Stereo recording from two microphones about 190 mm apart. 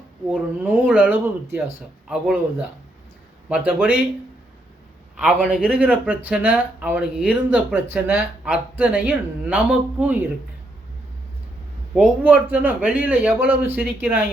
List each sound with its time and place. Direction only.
0.3 s speech: 5° right (ahead or behind)
5.1 s speech: 5° right (ahead or behind)
11.9 s speech: 10° right (ahead or behind)